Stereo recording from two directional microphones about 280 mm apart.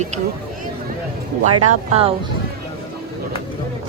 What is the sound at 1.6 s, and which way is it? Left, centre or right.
Speech, centre.